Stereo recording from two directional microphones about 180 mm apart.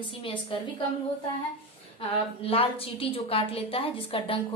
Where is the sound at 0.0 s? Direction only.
30° left (ahead or behind).